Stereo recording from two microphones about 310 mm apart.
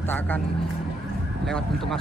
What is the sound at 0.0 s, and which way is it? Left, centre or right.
Speech, centre.